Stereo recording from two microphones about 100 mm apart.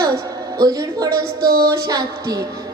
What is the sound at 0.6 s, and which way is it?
A woman's voice, 40° right (ahead or behind).